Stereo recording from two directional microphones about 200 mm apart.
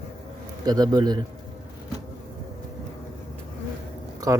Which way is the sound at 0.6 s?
20° right (ahead or behind).